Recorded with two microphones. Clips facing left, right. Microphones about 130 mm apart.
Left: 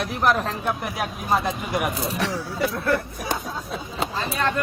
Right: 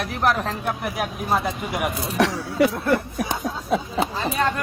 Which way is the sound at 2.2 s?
70° right (ahead or behind).